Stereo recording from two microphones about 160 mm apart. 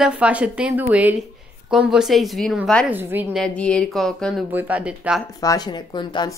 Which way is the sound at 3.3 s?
5° left (ahead or behind).